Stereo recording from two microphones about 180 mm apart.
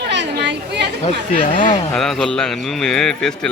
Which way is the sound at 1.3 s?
45° left (ahead or behind).